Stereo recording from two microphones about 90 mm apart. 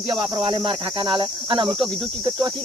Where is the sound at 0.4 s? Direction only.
70° right (ahead or behind).